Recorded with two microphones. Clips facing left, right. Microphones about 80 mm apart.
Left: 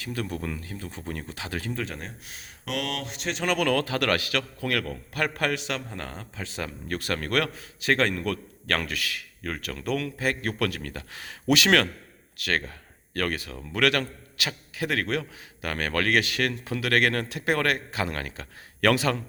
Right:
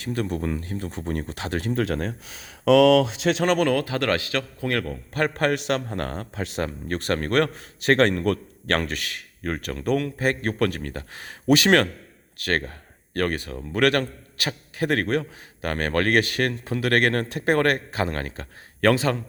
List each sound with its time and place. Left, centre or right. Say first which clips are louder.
0.0 s a man's voice: right 5 dB; right
1.8 s speech: right 9 dB; right
3.2 s speech: right 9 dB; right
3.4 s a man's voice: right 4 dB; right
3.7 s a man's voice: right 2 dB; right
6.7 s a man's voice: right 4 dB; right